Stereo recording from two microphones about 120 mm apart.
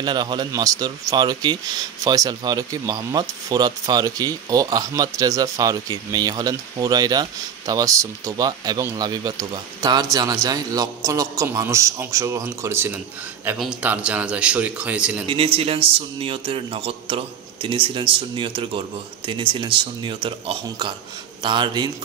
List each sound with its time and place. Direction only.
0.0 s a man's voice: 40° right (ahead or behind); by 13.0 s 20° right (ahead or behind)
13.6 s speech: 10° right (ahead or behind)
15.2 s a man's voice: 50° right (ahead or behind)